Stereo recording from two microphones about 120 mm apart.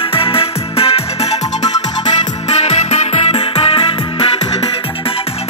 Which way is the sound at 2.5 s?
60° left (ahead or behind).